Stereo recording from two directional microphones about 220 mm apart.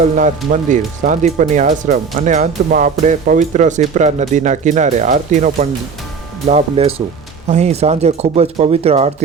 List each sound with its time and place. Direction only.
0.0 s speech: 35° right (ahead or behind)